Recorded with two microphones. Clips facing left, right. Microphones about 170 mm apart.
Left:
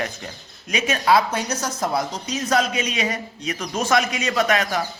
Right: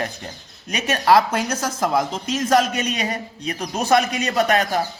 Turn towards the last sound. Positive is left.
turn(degrees=-35)  # may be behind; listen again after turning